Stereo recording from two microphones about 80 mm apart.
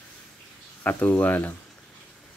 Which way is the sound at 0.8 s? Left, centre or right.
Left.